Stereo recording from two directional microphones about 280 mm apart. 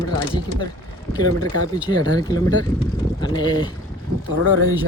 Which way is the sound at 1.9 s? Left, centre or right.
Centre.